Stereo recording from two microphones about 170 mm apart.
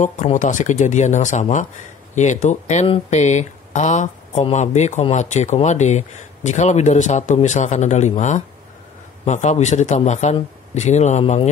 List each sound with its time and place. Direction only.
0.0 s speech: 45° left (ahead or behind)